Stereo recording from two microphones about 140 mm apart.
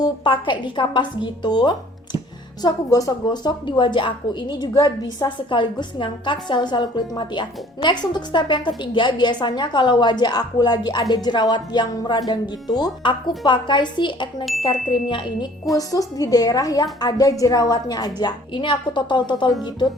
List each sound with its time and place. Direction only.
0.0 s a woman's voice: 35° left (ahead or behind)